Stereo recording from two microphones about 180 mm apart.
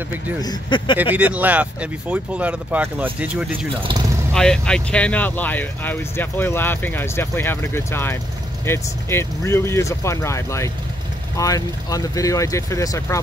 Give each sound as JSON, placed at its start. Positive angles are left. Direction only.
{"t": 0.4, "sound": "speech", "side_deg": 25}
{"t": 0.9, "sound": "speech", "side_deg": -10}
{"t": 4.3, "sound": "speech", "side_deg": 5}